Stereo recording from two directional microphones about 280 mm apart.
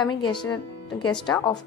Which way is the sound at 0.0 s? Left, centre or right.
Centre.